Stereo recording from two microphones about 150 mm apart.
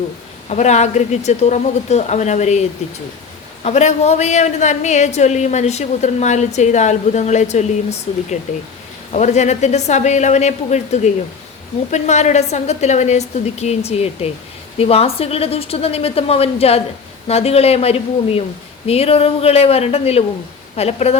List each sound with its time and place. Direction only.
0.4 s a woman's voice: 50° left (ahead or behind)